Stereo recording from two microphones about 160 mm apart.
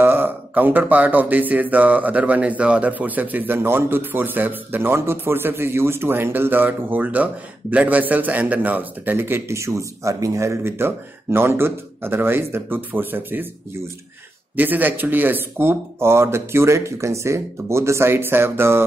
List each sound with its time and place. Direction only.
0.0 s speech: 15° right (ahead or behind)
14.5 s speech: 10° right (ahead or behind)